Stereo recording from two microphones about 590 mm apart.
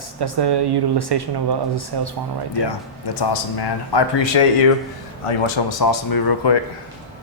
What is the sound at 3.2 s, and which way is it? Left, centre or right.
A man's voice, left.